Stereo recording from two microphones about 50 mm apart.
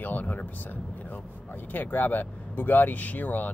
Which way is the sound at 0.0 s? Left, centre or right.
Left.